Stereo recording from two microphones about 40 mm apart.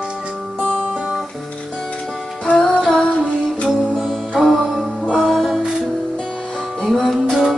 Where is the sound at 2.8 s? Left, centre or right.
Centre.